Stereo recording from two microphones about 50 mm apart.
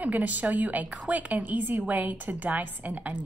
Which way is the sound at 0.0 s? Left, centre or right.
Right.